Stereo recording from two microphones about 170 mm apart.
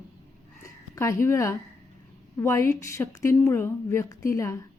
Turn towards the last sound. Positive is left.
turn(degrees=20)  # may be behind; listen again after turning